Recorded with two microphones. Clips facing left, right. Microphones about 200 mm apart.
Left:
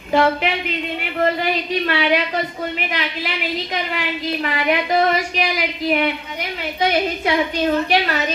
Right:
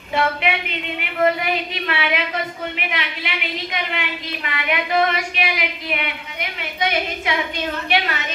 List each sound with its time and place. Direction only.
0.1 s a woman's voice: 35° left (ahead or behind)